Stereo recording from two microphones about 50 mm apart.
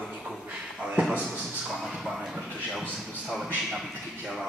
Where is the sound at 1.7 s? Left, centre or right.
Centre.